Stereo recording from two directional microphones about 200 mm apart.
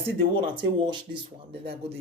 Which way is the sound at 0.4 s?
25° right (ahead or behind).